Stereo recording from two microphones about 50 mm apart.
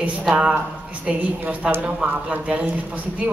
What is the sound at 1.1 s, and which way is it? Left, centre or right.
Speech, centre.